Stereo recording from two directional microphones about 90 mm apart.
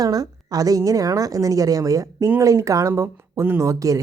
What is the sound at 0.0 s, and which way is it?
A woman's voice, 45° right (ahead or behind).